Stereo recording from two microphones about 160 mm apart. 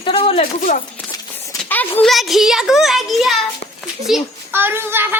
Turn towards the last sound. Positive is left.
turn(degrees=-15)  # may be behind; listen again after turning